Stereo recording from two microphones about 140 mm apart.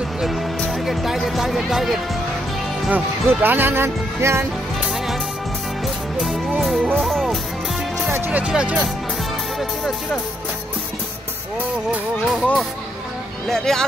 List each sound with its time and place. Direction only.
0.2 s speech: centre (ahead or behind)
2.9 s speech: 15° right (ahead or behind)
6.6 s speech: centre (ahead or behind)
8.1 s speech: 10° right (ahead or behind)
12.3 s speech: centre (ahead or behind)